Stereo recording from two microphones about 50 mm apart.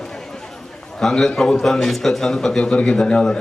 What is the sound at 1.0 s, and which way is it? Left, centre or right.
A man's voice, centre.